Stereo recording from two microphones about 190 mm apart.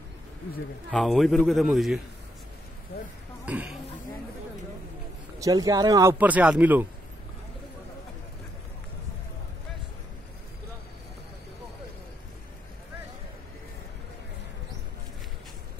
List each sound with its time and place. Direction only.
0.9 s a man's voice: centre (ahead or behind)
3.4 s speech: 10° right (ahead or behind)
5.4 s speech: 20° right (ahead or behind)